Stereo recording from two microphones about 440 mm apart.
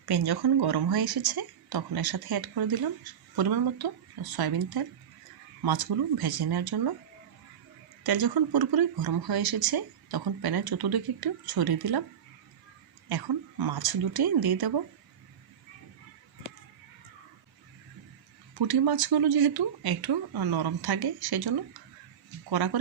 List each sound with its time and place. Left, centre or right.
0.0 s a woman's voice: right
8.0 s a woman's voice: right
13.1 s speech: right
18.5 s speech: right